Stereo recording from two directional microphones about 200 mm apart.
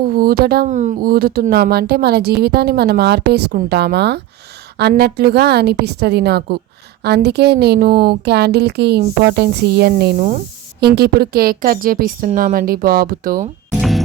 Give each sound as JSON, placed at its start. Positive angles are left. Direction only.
{"t": 0.1, "sound": "speech", "side_deg": -45}